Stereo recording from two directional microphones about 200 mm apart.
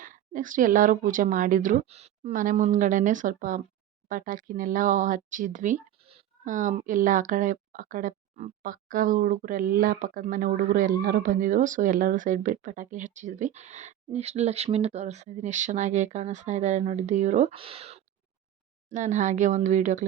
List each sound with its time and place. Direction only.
0.0 s speech: 40° right (ahead or behind)
6.0 s speech: 30° right (ahead or behind)